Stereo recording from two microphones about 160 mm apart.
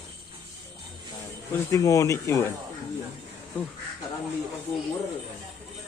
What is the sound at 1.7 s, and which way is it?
Speech, 20° left (ahead or behind).